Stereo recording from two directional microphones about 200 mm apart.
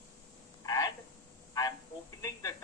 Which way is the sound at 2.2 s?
15° left (ahead or behind).